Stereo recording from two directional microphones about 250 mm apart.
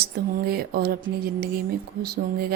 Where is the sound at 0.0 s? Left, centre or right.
Right.